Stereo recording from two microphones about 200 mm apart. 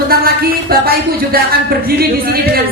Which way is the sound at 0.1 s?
50° right (ahead or behind).